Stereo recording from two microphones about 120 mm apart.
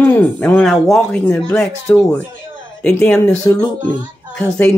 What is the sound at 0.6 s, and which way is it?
Speech, centre (ahead or behind).